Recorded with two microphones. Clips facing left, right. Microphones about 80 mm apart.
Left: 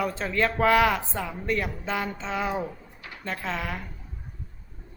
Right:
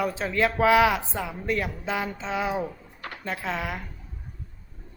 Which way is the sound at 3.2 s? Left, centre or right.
Centre.